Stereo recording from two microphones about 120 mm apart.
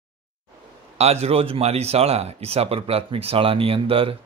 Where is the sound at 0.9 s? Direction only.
60° right (ahead or behind).